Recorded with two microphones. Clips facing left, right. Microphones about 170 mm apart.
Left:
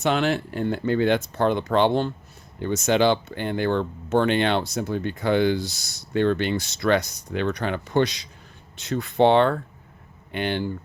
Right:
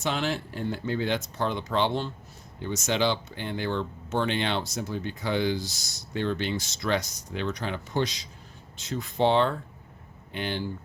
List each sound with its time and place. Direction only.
0.0 s speech: 60° left (ahead or behind)